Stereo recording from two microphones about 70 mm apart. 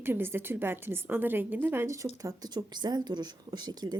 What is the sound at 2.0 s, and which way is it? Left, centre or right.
Speech, right.